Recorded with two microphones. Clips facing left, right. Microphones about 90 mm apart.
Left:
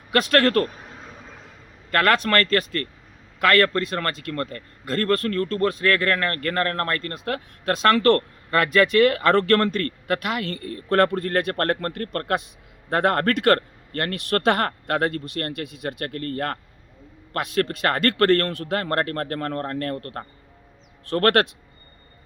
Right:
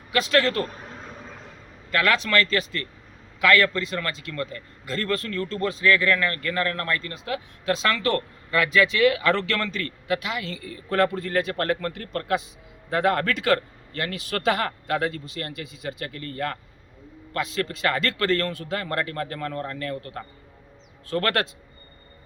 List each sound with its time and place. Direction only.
0.1 s a man's voice: 55° left (ahead or behind)
0.7 s a sound: centre (ahead or behind)
1.9 s a man's voice: 50° left (ahead or behind)